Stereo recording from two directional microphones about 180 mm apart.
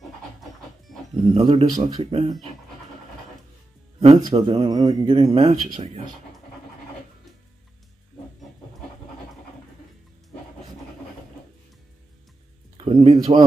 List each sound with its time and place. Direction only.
1.3 s speech: 30° right (ahead or behind)
4.0 s speech: 30° right (ahead or behind)
12.7 s speech: 35° right (ahead or behind)